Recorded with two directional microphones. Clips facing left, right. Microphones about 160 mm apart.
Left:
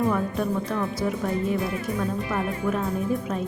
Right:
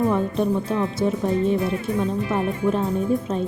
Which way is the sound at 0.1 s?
25° right (ahead or behind).